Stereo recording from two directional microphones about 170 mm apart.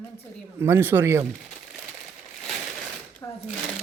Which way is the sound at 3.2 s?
20° left (ahead or behind).